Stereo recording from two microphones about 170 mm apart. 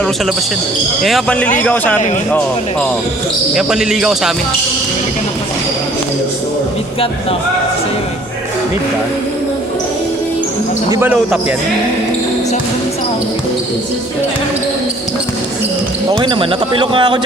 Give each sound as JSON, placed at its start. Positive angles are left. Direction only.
{"t": 1.0, "sound": "a man's voice", "side_deg": 5}
{"t": 3.5, "sound": "speech", "side_deg": -5}
{"t": 10.8, "sound": "speech", "side_deg": -20}
{"t": 16.1, "sound": "speech", "side_deg": -25}